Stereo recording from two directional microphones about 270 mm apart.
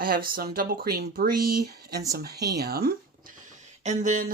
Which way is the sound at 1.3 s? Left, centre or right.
Right.